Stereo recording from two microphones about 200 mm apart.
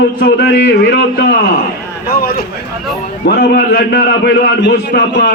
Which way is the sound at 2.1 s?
50° left (ahead or behind).